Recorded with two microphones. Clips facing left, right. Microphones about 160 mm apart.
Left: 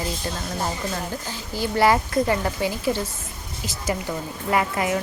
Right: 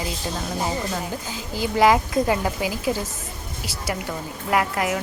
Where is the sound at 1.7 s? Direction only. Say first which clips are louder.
Right 1 dB; 10° right (ahead or behind).